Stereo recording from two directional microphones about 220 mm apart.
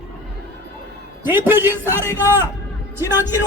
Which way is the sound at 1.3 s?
10° right (ahead or behind).